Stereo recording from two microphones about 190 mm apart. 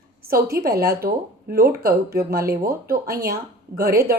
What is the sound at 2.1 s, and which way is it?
Speech, 50° right (ahead or behind).